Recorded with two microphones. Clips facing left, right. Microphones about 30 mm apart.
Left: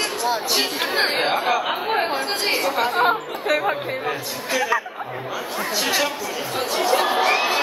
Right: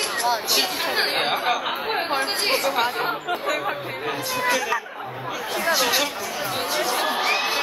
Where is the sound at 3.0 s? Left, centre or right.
Left.